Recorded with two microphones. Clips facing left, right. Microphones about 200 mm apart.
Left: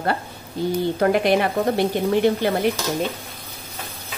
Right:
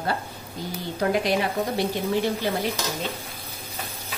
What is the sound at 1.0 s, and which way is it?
Speech, 60° left (ahead or behind).